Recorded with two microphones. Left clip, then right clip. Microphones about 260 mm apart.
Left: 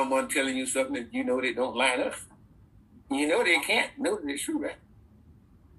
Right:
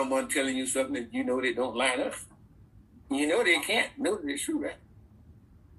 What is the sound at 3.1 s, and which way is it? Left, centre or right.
Speech, left.